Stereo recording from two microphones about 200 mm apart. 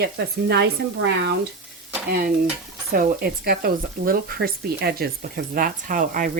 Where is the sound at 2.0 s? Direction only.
50° right (ahead or behind).